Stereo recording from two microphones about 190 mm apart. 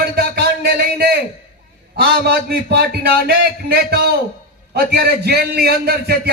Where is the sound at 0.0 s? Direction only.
55° right (ahead or behind).